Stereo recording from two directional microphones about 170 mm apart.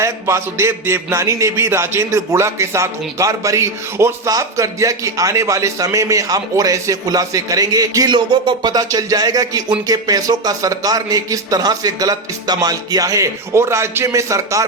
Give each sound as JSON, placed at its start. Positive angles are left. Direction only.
{"t": 0.0, "sound": "a man's voice", "side_deg": -15}